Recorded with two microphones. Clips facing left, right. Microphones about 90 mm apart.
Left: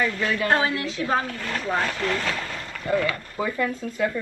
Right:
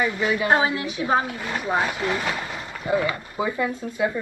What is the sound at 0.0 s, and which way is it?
A woman's voice, 15° right (ahead or behind).